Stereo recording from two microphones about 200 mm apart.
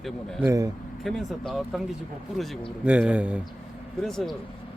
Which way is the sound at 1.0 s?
Centre (ahead or behind).